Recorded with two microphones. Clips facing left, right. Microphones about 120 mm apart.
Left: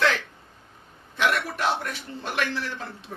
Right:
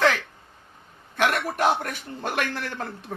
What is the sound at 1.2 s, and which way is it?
A man's voice, 50° right (ahead or behind).